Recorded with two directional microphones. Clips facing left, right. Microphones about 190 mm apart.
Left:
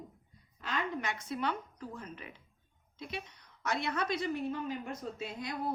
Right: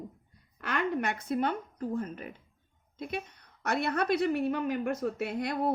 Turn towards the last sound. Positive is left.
turn(degrees=-65)  # may be behind; listen again after turning